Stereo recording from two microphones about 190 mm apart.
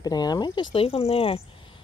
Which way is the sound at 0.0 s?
20° left (ahead or behind).